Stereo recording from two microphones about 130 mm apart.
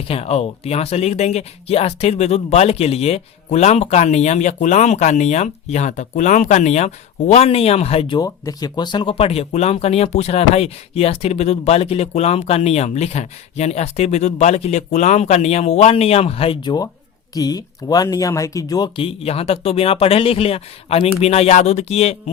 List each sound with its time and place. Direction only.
0.1 s speech: 50° left (ahead or behind)
8.2 s speech: 30° left (ahead or behind); by 16.7 s 45° left (ahead or behind)
17.3 s speech: 30° left (ahead or behind)
18.9 s speech: 50° left (ahead or behind)